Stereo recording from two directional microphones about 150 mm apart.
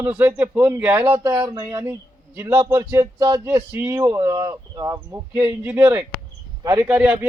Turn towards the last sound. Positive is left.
turn(degrees=-10)  # may be behind; listen again after turning